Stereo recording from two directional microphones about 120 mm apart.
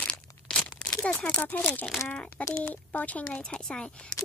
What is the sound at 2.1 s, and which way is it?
Speech, 10° left (ahead or behind).